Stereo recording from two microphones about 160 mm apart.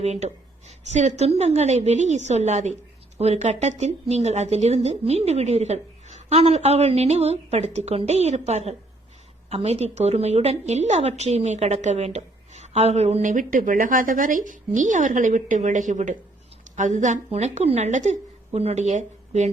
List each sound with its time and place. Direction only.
0.0 s a woman's voice: 45° right (ahead or behind)